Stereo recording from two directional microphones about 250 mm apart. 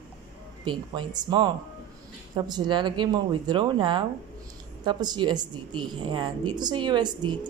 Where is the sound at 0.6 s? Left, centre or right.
Centre.